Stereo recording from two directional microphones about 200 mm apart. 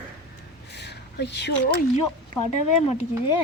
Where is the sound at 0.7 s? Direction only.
55° left (ahead or behind).